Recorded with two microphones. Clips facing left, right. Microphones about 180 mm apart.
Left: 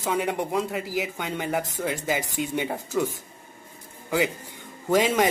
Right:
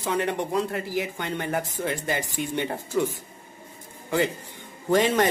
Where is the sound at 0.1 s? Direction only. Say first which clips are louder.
Even; 5° left (ahead or behind).